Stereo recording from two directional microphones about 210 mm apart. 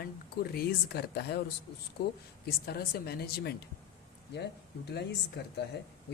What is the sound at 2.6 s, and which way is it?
Speech, 50° left (ahead or behind).